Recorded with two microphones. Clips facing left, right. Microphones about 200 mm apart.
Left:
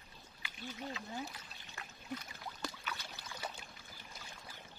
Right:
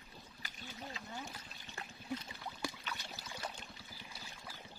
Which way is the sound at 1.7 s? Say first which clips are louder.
Right 2 dB; 30° right (ahead or behind).